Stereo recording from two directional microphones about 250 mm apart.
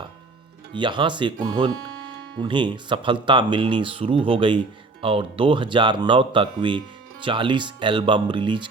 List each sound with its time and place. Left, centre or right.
0.7 s speech: centre